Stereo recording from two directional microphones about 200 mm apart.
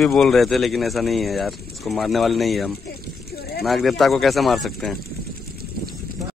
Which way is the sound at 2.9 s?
55° left (ahead or behind).